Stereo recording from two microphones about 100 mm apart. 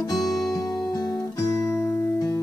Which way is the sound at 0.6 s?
40° left (ahead or behind).